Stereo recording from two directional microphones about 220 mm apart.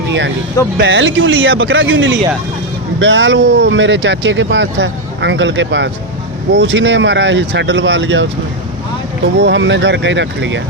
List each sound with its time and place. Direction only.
0.8 s speech: 60° right (ahead or behind)